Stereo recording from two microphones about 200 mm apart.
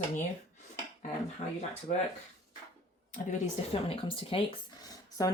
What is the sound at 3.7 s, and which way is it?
Speech, 30° left (ahead or behind).